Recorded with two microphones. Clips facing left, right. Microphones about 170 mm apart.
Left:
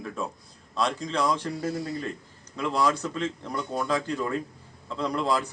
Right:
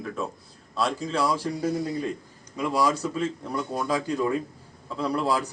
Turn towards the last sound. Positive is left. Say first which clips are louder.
# right 1 dB
turn(degrees=-10)  # may be behind; listen again after turning